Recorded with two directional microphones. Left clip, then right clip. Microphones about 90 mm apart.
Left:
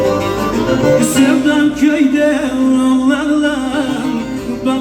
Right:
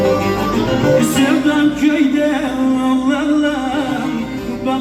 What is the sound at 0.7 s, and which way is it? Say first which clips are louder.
Music: left 3 dB; 50° left (ahead or behind).